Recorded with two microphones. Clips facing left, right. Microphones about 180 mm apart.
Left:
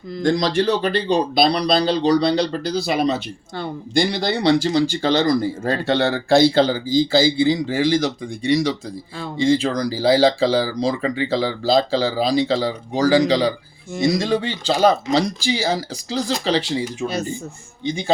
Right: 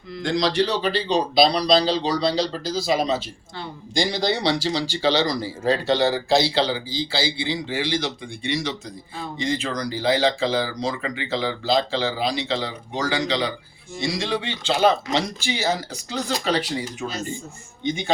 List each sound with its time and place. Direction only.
0.2 s speech: 45° left (ahead or behind); by 17.1 s 25° left (ahead or behind)